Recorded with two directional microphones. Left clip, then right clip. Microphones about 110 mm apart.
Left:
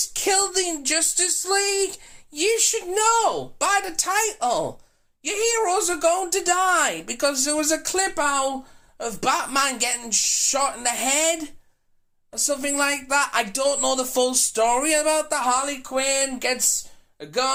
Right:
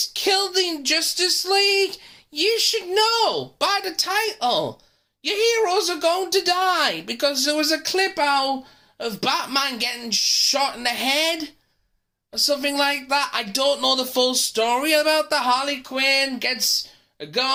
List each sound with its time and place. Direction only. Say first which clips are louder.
0.1 s speech: right 1 dB; 15° right (ahead or behind)